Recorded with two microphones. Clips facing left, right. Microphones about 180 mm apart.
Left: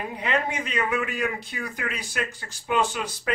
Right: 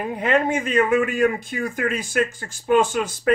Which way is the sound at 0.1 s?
50° right (ahead or behind).